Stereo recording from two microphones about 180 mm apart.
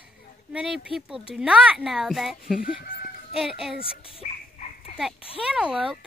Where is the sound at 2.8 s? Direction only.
55° left (ahead or behind).